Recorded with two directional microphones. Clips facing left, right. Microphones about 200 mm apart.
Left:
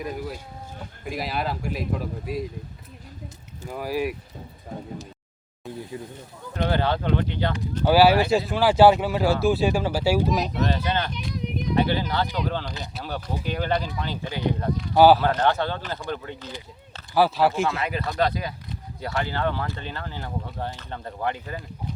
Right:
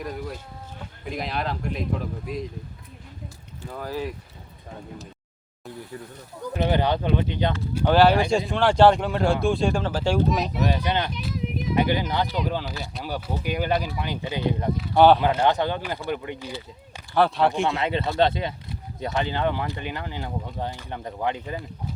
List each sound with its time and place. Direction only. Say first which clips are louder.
0.0 s speech: left 1 dB; 5° left (ahead or behind)
3.7 s speech: left 4 dB; 10° left (ahead or behind)
5.9 s speech: left 2 dB; 20° left (ahead or behind)
6.7 s speech: right 1 dB; 15° right (ahead or behind)
7.9 s speech: left 1 dB; 5° left (ahead or behind)
10.7 s speech: right 1 dB; 15° right (ahead or behind)
11.1 s a sound: right 1 dB; 5° right (ahead or behind)
11.7 s speech: even; 15° right (ahead or behind)
14.8 s speech: left 1 dB; 5° left (ahead or behind)
15.2 s speech: right 1 dB; 15° right (ahead or behind)
17.2 s speech: even; 5° left (ahead or behind)
17.8 s speech: right 3 dB; 25° right (ahead or behind)